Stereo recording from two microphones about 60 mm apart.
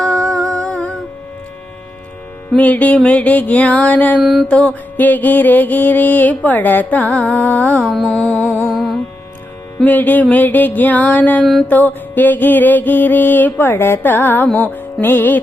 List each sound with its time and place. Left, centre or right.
0.0 s music: centre
2.6 s music: left
4.2 s music: centre
4.4 s music: left
7.9 s music: centre
8.1 s music: centre
8.7 s music: centre
9.8 s music: left